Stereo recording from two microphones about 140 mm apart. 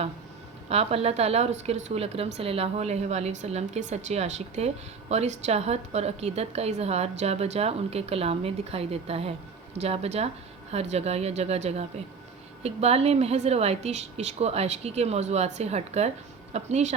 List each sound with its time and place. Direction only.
0.7 s a woman's voice: 45° right (ahead or behind)